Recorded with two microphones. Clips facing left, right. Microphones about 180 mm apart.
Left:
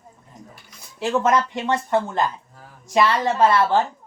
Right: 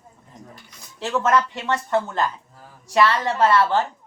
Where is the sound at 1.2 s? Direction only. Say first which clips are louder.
Even; 15° left (ahead or behind).